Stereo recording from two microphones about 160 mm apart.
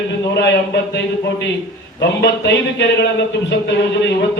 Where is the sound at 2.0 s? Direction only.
90° left.